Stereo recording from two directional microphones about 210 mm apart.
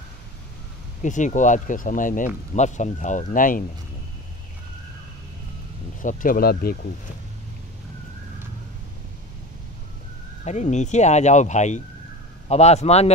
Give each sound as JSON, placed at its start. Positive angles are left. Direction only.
{"t": 1.0, "sound": "speech", "side_deg": 35}
{"t": 6.0, "sound": "speech", "side_deg": 40}
{"t": 10.4, "sound": "speech", "side_deg": 35}